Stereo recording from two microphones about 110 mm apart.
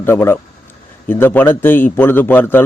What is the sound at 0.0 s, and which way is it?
A man's voice, 20° left (ahead or behind).